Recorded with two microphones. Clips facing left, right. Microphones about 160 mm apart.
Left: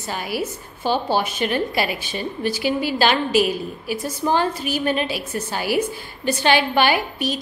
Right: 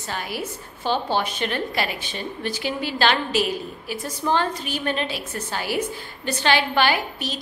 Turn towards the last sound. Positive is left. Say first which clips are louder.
# left 3 dB
turn(degrees=15)  # may be behind; listen again after turning